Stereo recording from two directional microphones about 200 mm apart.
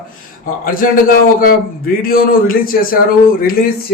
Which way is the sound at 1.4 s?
45° left (ahead or behind).